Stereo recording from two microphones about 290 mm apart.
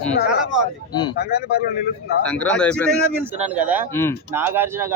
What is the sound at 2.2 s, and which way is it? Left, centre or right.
Speech, centre.